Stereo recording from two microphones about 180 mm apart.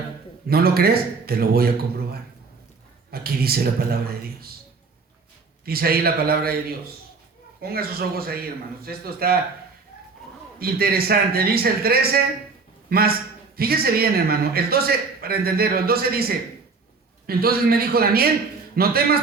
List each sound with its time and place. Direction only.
0.4 s a man's voice: 60° right (ahead or behind)
3.1 s a man's voice: 60° right (ahead or behind)
5.6 s a man's voice: 60° right (ahead or behind)
10.6 s a man's voice: 60° right (ahead or behind)
17.2 s a man's voice: 60° right (ahead or behind)